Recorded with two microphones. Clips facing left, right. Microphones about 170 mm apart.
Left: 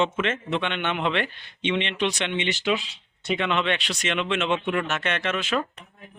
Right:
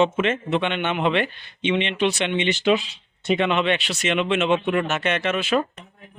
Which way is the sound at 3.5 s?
10° right (ahead or behind).